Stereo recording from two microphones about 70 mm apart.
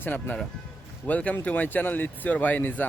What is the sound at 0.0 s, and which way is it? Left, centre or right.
Speech, left.